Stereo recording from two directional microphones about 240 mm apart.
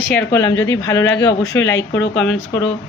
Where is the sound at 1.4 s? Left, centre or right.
Left.